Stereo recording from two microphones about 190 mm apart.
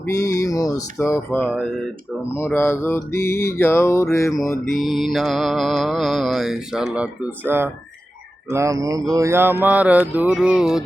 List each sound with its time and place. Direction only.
0.1 s speech: 15° left (ahead or behind)
4.8 s mantra: centre (ahead or behind)
8.4 s speech: 15° right (ahead or behind)
10.1 s mantra: 5° right (ahead or behind)